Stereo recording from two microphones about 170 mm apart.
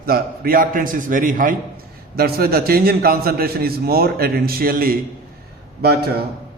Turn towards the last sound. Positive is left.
turn(degrees=-70)  # may be behind; listen again after turning